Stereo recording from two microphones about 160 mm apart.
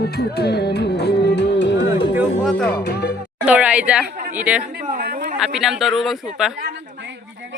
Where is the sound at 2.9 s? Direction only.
80° left.